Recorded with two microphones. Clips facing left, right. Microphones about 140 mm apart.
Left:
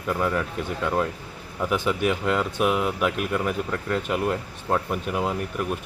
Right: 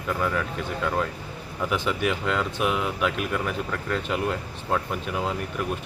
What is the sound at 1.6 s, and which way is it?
A man's voice, 5° left (ahead or behind).